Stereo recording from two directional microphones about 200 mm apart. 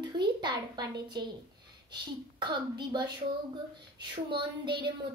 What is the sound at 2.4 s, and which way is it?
Speech, 20° right (ahead or behind).